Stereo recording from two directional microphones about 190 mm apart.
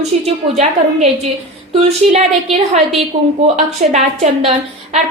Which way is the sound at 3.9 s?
35° right (ahead or behind).